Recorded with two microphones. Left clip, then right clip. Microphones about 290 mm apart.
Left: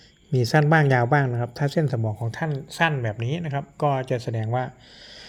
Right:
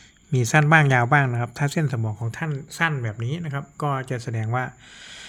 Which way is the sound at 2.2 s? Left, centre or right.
Centre.